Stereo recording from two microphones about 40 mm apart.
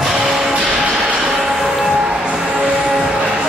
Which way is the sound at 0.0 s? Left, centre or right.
Centre.